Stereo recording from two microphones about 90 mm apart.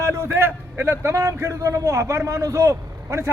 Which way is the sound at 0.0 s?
30° right (ahead or behind).